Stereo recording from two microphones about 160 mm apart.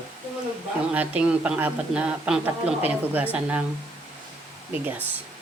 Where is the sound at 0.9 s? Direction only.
10° right (ahead or behind).